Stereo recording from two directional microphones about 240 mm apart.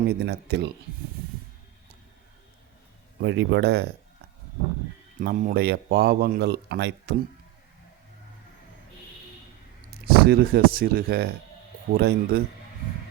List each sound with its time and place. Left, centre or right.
0.1 s speech: right
3.2 s speech: right
5.2 s speech: right
9.9 s speech: right